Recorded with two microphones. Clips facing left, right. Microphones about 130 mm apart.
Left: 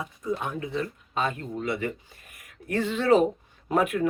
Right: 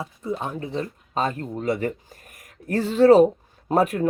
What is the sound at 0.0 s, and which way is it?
Speech, 30° right (ahead or behind).